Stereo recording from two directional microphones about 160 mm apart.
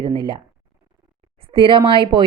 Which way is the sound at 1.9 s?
30° right (ahead or behind).